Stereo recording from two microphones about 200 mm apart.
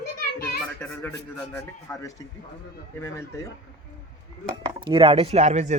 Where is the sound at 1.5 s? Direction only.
15° left (ahead or behind).